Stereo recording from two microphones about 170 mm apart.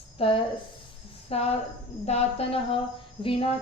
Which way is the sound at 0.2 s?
35° left (ahead or behind).